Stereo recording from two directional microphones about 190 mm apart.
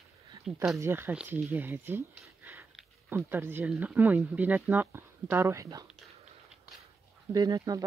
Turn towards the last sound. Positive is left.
turn(degrees=-20)  # may be behind; listen again after turning